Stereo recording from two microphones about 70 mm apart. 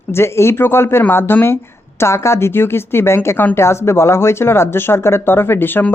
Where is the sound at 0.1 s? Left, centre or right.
Left.